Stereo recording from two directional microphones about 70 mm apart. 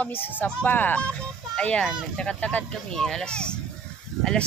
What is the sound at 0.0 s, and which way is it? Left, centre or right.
Speech, left.